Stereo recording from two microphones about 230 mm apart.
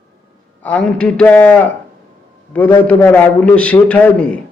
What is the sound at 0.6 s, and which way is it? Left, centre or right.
A man's voice, centre.